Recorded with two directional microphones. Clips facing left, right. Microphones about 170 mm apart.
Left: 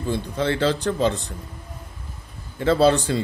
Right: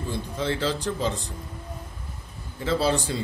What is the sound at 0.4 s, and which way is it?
Speech, 60° left (ahead or behind).